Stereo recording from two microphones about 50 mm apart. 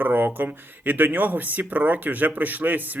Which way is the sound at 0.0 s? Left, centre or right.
Right.